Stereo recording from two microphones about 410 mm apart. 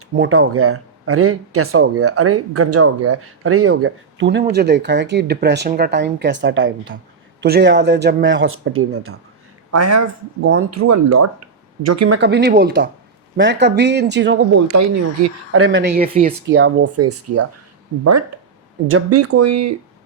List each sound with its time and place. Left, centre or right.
0.2 s speech: right
16.0 s speech: centre
16.5 s speech: right
18.9 s speech: right